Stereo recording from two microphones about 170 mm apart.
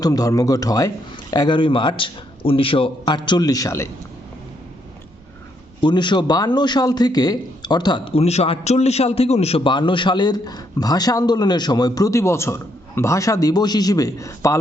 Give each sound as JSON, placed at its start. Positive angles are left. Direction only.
{"t": 0.0, "sound": "a man's voice", "side_deg": 20}
{"t": 5.8, "sound": "a man's voice", "side_deg": 25}